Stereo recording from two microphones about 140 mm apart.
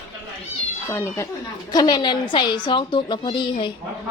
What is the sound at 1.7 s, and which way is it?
A woman's voice, 30° left (ahead or behind).